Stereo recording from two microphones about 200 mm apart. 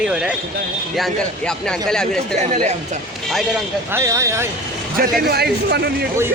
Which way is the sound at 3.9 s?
15° right (ahead or behind).